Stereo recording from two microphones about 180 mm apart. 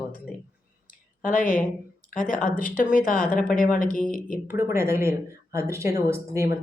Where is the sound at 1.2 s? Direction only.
50° left (ahead or behind).